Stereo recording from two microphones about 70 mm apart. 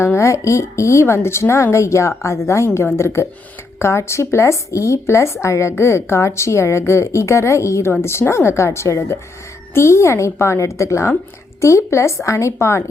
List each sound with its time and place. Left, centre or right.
0.0 s speech: left